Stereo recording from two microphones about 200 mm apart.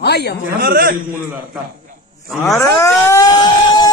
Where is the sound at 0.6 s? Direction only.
50° right (ahead or behind).